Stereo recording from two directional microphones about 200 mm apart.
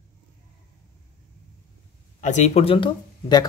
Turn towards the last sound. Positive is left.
turn(degrees=25)  # may be behind; listen again after turning